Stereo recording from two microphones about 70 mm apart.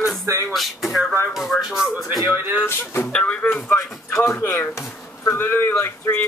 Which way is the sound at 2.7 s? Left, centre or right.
Left.